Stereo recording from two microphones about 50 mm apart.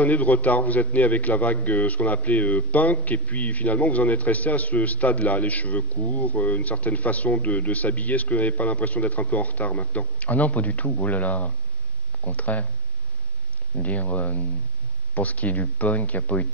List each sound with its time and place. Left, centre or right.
0.0 s a man's voice: left
13.7 s a man's voice: left